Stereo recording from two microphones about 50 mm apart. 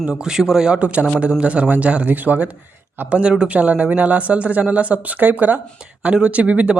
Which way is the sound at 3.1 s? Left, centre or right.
Right.